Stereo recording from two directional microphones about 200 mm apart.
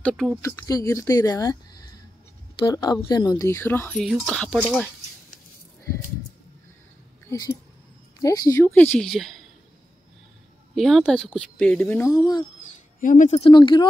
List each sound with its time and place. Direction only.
0.0 s a woman's voice: centre (ahead or behind)
0.4 s a woman's voice: 15° left (ahead or behind)
7.2 s speech: 15° left (ahead or behind); by 9.4 s centre (ahead or behind)
10.7 s a woman's voice: centre (ahead or behind)
12.2 s speech: 20° left (ahead or behind)
13.0 s speech: 40° left (ahead or behind)
13.4 s speech: 20° left (ahead or behind)